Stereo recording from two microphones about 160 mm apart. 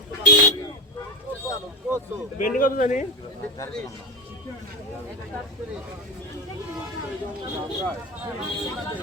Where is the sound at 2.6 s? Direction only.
55° left (ahead or behind).